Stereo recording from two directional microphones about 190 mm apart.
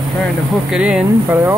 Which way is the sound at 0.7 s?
5° right (ahead or behind).